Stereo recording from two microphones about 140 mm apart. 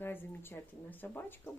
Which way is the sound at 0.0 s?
15° left (ahead or behind).